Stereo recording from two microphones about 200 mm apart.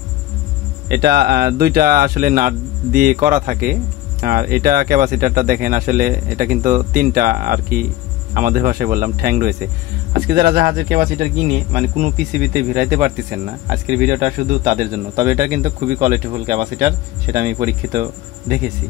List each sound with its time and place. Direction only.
0.8 s speech: 55° right (ahead or behind)